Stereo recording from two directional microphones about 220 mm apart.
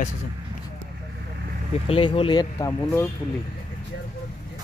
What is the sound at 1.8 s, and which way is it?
Speech, 25° left (ahead or behind).